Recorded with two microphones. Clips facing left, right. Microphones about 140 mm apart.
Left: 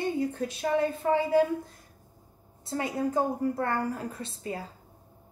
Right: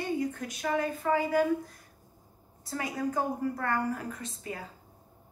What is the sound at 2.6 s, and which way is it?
Speech, 25° left (ahead or behind).